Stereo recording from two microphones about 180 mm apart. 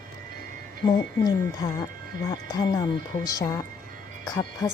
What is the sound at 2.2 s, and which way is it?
A woman's voice, 20° left (ahead or behind).